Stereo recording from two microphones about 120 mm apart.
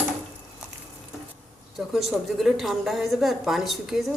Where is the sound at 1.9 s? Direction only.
Centre (ahead or behind).